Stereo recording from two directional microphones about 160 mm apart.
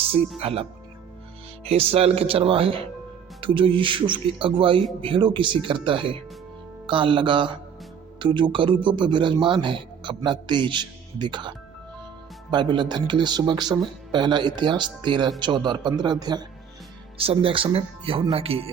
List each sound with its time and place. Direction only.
0.3 s speech: 35° right (ahead or behind)